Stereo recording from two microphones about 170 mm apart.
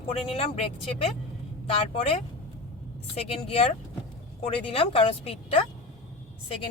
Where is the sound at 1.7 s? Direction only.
35° left (ahead or behind).